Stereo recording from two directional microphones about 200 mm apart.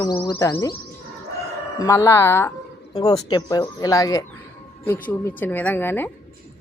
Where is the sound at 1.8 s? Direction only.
15° left (ahead or behind).